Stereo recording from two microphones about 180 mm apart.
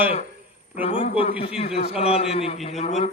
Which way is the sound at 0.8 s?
30° left (ahead or behind).